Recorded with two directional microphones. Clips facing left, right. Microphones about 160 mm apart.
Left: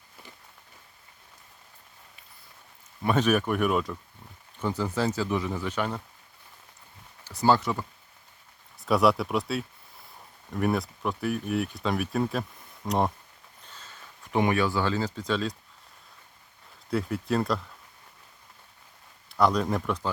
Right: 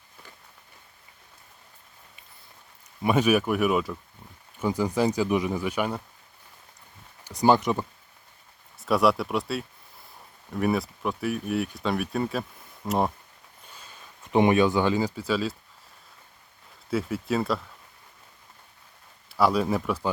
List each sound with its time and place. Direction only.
3.0 s speech: 10° right (ahead or behind)
7.3 s speech: 15° right (ahead or behind)
8.8 s speech: centre (ahead or behind)
16.9 s speech: centre (ahead or behind)
19.3 s speech: 5° right (ahead or behind)